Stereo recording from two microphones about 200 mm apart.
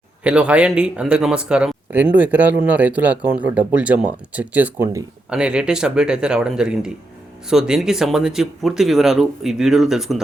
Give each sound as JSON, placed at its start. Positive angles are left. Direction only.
{"t": 0.3, "sound": "speech", "side_deg": -5}